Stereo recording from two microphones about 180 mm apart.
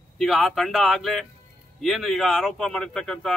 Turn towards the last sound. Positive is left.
turn(degrees=5)  # may be behind; listen again after turning